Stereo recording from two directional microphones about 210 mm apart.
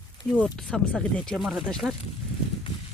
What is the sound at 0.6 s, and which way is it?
Speech, 5° left (ahead or behind).